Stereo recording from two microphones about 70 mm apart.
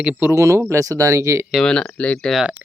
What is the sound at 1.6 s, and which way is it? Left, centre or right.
Speech, centre.